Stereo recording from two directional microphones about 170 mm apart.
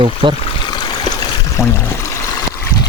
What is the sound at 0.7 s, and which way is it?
Stream, 25° left (ahead or behind).